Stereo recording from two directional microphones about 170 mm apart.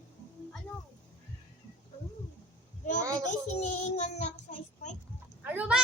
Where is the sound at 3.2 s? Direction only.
45° left (ahead or behind).